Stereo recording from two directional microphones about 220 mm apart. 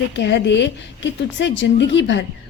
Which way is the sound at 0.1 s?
50° left (ahead or behind).